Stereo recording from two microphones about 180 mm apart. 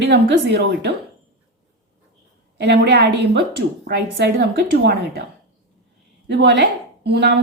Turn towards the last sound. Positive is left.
turn(degrees=-65)  # may be behind; listen again after turning